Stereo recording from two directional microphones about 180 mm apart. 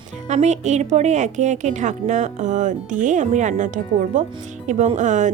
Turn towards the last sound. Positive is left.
turn(degrees=-45)  # may be behind; listen again after turning